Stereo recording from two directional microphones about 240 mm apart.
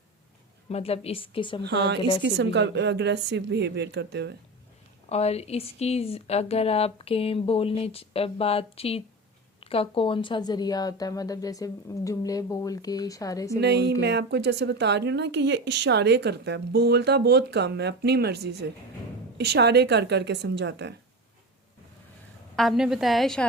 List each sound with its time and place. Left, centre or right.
0.7 s speech: left
1.6 s speech: right
5.0 s speech: left
13.6 s speech: right
22.5 s a woman's voice: centre